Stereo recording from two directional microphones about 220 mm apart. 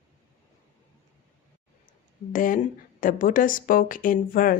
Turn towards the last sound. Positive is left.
turn(degrees=40)  # may be behind; listen again after turning